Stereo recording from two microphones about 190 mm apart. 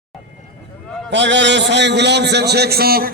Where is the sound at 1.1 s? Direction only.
70° right (ahead or behind).